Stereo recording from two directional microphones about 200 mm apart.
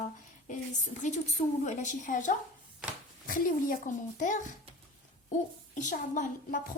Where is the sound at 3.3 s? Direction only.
40° left (ahead or behind).